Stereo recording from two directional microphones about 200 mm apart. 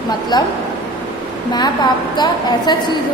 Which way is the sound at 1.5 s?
20° left (ahead or behind).